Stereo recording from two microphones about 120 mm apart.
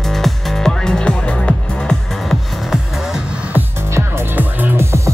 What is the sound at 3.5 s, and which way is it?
Music, 20° right (ahead or behind).